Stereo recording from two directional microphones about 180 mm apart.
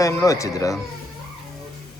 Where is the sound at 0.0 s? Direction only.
15° left (ahead or behind).